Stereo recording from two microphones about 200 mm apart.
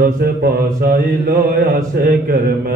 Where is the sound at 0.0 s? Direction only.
50° right (ahead or behind).